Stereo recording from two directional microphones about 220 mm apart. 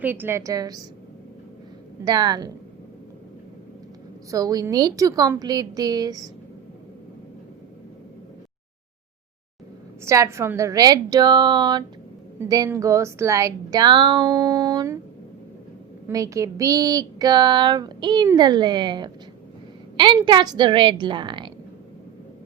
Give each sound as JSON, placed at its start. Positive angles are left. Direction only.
{"t": 0.0, "sound": "speech", "side_deg": -10}
{"t": 2.0, "sound": "a woman's voice", "side_deg": -20}
{"t": 4.3, "sound": "speech", "side_deg": -15}
{"t": 10.0, "sound": "speech", "side_deg": -15}
{"t": 16.0, "sound": "a woman's voice", "side_deg": -15}